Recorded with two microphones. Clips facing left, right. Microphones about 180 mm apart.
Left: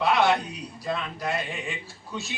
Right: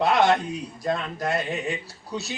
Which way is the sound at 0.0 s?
45° right (ahead or behind).